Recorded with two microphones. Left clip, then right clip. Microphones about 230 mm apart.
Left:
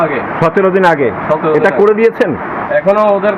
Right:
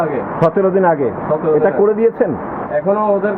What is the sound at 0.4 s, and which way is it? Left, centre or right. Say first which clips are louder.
A man's voice: left 3 dB; left.